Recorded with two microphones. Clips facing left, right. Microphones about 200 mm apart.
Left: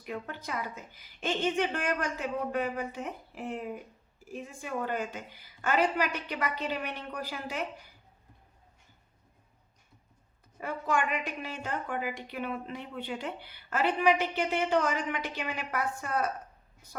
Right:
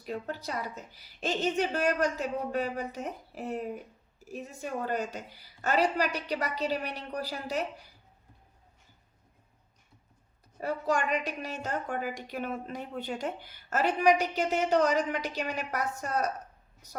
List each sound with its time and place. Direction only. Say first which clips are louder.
0.0 s a woman's voice: right 3 dB; 35° right (ahead or behind)
10.6 s a woman's voice: right 1 dB; 40° right (ahead or behind)